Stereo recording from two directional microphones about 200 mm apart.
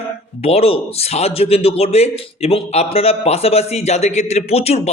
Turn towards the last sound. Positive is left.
turn(degrees=30)  # may be behind; listen again after turning